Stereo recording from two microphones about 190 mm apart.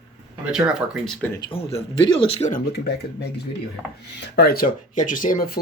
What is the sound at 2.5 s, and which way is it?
Speech, 60° left (ahead or behind).